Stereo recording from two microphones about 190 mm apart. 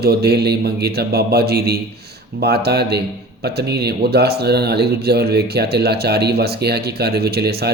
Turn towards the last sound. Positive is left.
turn(degrees=-55)  # may be behind; listen again after turning